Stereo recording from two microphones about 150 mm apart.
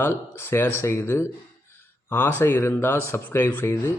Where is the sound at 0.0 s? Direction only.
15° left (ahead or behind).